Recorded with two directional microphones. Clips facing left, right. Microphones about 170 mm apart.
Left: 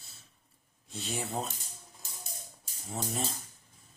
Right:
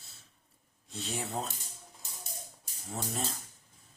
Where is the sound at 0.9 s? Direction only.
Centre (ahead or behind).